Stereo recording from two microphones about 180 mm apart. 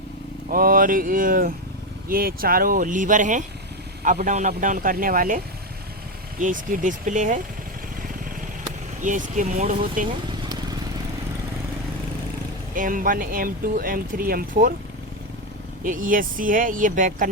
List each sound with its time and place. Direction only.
0.5 s speech: 50° right (ahead or behind)
6.4 s speech: 45° right (ahead or behind)
9.0 s speech: 45° right (ahead or behind)
12.7 s speech: 50° right (ahead or behind)
15.8 s speech: 50° right (ahead or behind)